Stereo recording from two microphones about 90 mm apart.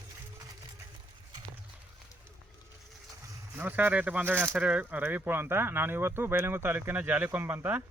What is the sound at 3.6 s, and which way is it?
Speech, 20° right (ahead or behind).